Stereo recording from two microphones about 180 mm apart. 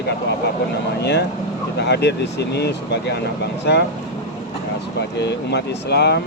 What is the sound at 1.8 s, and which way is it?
Speech, 70° left (ahead or behind).